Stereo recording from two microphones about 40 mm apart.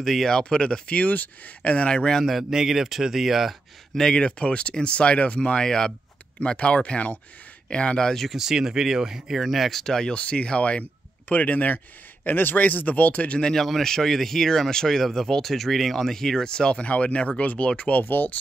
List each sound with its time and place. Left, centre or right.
0.0 s speech: centre
0.3 s speech: left
2.5 s speech: centre
4.1 s speech: left
6.4 s speech: left
8.0 s speech: centre
8.3 s speech: centre
9.7 s speech: centre
10.1 s speech: left
13.4 s speech: centre
16.8 s speech: left
18.0 s speech: left